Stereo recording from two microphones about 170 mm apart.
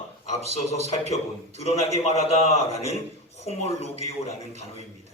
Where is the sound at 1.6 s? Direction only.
40° left (ahead or behind).